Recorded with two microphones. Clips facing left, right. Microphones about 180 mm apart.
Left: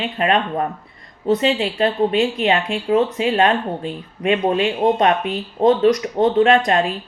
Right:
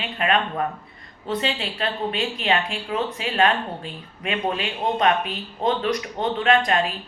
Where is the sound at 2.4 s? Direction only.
25° left (ahead or behind).